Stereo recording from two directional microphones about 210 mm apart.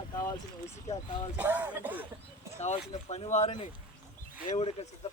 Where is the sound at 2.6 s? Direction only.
35° left (ahead or behind).